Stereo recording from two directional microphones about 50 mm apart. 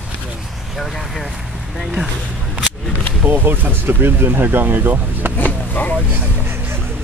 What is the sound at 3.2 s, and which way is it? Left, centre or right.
Speech, right.